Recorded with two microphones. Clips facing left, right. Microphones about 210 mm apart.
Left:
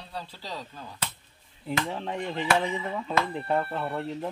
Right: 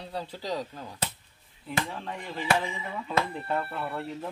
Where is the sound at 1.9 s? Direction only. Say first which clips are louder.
Left 5 dB; 25° left (ahead or behind).